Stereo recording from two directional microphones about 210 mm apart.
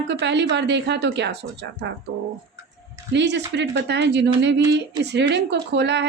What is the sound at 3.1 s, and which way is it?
Speech, 55° right (ahead or behind).